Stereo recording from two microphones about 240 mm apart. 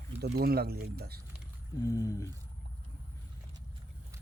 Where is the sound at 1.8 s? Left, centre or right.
Centre.